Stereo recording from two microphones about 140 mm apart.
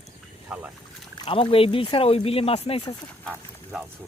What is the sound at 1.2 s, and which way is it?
Speech, 40° left (ahead or behind).